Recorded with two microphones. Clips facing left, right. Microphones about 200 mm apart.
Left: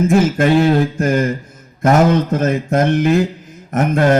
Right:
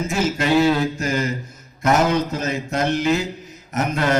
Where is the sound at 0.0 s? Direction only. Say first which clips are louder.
Left 8 dB; 55° left (ahead or behind).